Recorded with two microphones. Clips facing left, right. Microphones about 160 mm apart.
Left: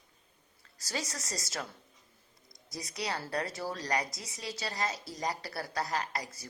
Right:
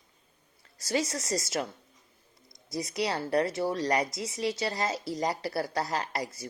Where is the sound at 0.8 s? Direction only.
25° right (ahead or behind).